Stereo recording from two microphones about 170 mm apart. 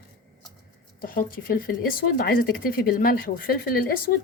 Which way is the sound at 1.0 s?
60° left (ahead or behind).